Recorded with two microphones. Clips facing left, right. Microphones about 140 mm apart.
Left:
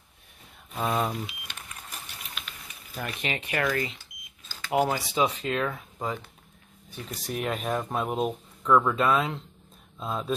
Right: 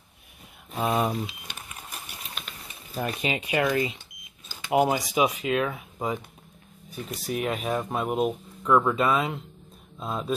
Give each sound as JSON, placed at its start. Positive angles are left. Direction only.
{"t": 0.7, "sound": "speech", "side_deg": -15}
{"t": 1.5, "sound": "cash register", "side_deg": -15}
{"t": 2.9, "sound": "speech", "side_deg": -30}
{"t": 3.2, "sound": "speech", "side_deg": -15}